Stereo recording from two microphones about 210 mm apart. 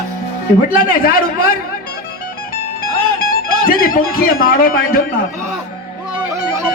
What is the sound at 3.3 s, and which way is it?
A man's voice, 45° left (ahead or behind).